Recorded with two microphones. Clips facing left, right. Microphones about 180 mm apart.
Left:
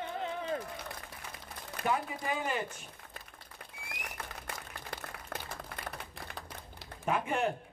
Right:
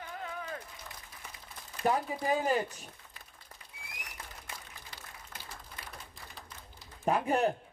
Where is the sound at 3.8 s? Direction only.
60° left (ahead or behind).